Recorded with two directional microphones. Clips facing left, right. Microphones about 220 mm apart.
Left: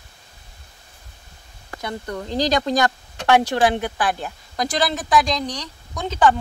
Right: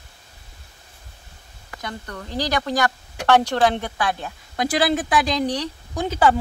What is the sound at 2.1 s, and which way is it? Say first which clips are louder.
Speech: left 4 dB; 15° left (ahead or behind).